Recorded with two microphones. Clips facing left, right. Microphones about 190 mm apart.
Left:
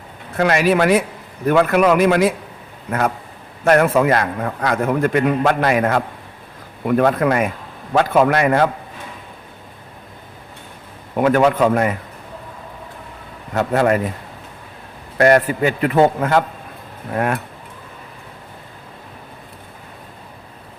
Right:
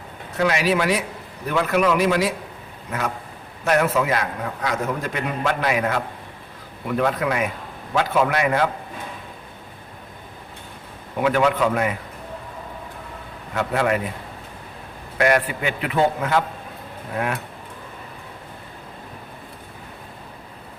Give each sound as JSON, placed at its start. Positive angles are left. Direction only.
{"t": 0.3, "sound": "a man's voice", "side_deg": 55}
{"t": 3.6, "sound": "a man's voice", "side_deg": 50}
{"t": 11.2, "sound": "a man's voice", "side_deg": 45}
{"t": 13.5, "sound": "a man's voice", "side_deg": 45}
{"t": 15.2, "sound": "a man's voice", "side_deg": 40}